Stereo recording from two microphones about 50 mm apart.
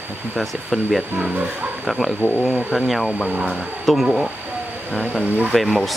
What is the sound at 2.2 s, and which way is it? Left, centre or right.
Speech, left.